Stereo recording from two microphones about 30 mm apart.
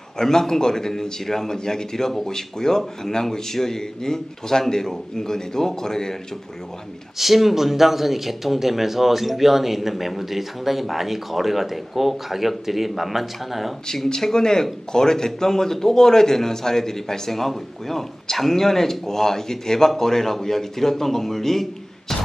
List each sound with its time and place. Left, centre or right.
0.2 s speech: centre
7.2 s speech: centre
14.3 s speech: centre